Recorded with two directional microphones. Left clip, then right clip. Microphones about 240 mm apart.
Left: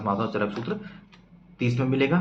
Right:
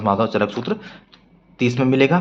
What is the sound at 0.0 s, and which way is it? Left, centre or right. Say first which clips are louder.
A man's voice: right 8 dB; right.